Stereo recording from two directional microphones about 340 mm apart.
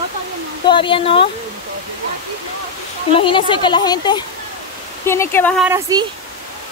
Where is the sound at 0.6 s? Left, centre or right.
Centre.